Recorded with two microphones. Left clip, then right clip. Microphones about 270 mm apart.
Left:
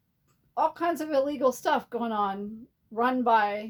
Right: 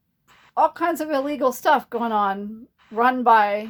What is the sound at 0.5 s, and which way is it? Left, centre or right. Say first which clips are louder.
A woman's voice: right 6 dB; right.